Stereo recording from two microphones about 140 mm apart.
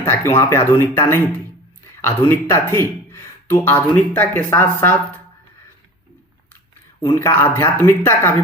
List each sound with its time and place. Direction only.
0.0 s speech: 15° left (ahead or behind)
7.0 s speech: 20° left (ahead or behind)